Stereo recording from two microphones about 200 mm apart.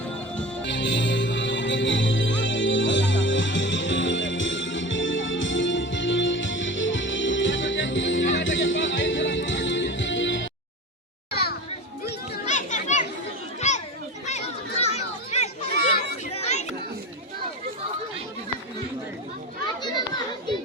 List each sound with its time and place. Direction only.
0.6 s music: 65° left (ahead or behind)
11.3 s a sound: 50° left (ahead or behind)
12.5 s children playing: 35° left (ahead or behind)
16.3 s chatter: 35° left (ahead or behind)
19.8 s children playing: 20° left (ahead or behind)